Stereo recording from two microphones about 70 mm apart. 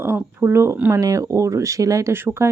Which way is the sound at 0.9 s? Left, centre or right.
Right.